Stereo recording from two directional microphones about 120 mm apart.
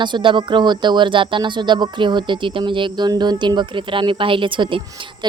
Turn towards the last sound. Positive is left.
turn(degrees=-45)  # may be behind; listen again after turning